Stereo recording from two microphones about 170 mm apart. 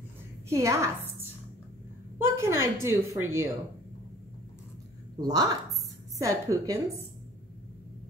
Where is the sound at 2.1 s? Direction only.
15° right (ahead or behind).